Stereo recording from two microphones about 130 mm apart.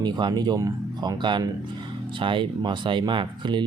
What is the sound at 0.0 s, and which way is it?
Speech, 35° right (ahead or behind).